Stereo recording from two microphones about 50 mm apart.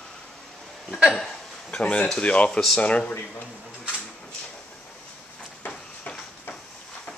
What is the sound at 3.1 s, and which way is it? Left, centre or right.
Speech, left.